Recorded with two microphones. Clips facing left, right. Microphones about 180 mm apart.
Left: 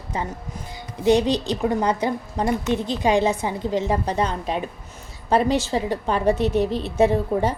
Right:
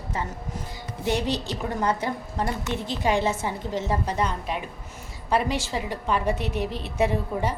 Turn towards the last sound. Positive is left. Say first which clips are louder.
# left 6 dB
turn(degrees=30)  # may be behind; listen again after turning